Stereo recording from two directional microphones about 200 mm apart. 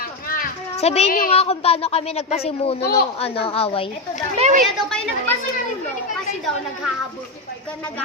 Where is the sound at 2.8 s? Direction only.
50° left (ahead or behind).